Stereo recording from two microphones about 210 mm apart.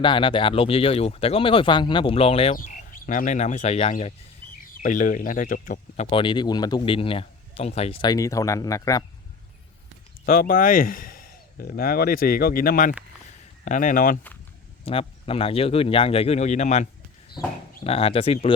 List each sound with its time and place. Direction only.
0.0 s speech: 25° left (ahead or behind)
2.6 s speech: 40° left (ahead or behind)
4.7 s speech: 40° left (ahead or behind)
6.1 s speech: 25° left (ahead or behind)
8.1 s speech: 15° left (ahead or behind)
10.2 s speech: 45° left (ahead or behind)
14.8 s speech: 25° left (ahead or behind)